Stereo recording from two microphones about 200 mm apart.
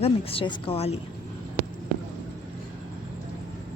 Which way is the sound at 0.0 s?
30° left (ahead or behind).